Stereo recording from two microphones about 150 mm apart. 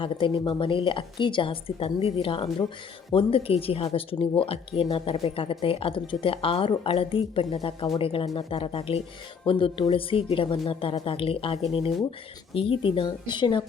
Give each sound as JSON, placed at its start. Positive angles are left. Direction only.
{"t": 0.0, "sound": "a woman's voice", "side_deg": 35}